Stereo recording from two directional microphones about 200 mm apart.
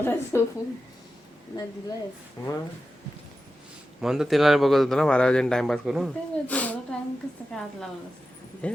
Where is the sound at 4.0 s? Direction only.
Centre (ahead or behind).